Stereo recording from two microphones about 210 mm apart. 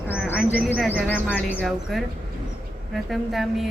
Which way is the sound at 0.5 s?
5° left (ahead or behind).